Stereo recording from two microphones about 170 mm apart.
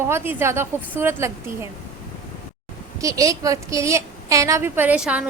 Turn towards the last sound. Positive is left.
turn(degrees=-5)  # may be behind; listen again after turning